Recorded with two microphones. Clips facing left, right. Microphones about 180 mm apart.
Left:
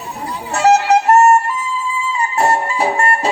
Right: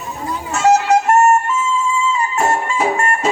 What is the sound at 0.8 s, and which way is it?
Music, 35° left (ahead or behind).